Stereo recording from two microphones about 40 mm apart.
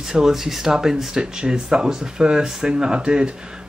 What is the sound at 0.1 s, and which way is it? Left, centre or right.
Speech, centre.